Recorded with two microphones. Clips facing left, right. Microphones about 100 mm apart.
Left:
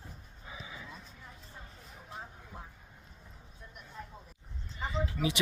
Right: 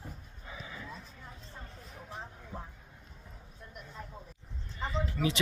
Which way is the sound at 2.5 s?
35° right (ahead or behind).